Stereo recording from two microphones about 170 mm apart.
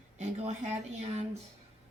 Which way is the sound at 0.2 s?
40° right (ahead or behind).